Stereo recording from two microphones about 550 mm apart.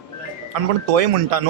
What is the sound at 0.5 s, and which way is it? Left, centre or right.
Speech, right.